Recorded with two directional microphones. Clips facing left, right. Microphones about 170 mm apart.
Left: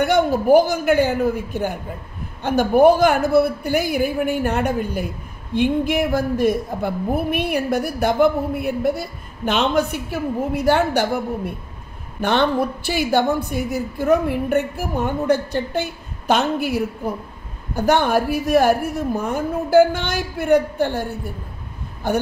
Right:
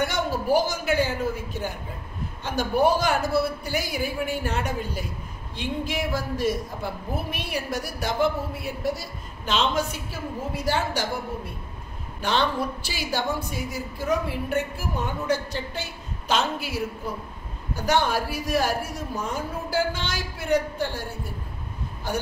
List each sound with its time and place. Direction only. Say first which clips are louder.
0.0 s a woman's voice: left 9 dB; 55° left (ahead or behind)